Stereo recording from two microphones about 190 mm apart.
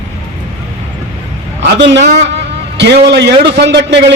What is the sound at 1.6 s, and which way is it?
A man's voice, 70° right (ahead or behind).